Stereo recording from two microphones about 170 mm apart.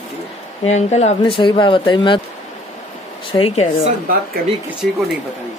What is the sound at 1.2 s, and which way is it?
Speech, 30° left (ahead or behind).